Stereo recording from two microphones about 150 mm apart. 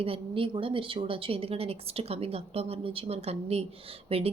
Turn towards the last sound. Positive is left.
turn(degrees=-40)  # may be behind; listen again after turning